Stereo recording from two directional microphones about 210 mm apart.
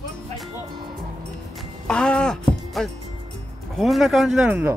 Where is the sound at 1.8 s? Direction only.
5° left (ahead or behind).